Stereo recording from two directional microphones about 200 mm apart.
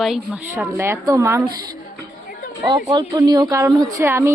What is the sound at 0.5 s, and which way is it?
Speech, 10° right (ahead or behind).